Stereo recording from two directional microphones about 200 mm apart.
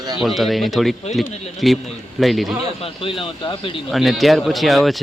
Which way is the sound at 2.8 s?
25° left (ahead or behind).